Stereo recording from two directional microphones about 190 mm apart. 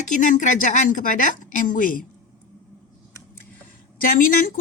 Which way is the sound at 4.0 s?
45° left (ahead or behind).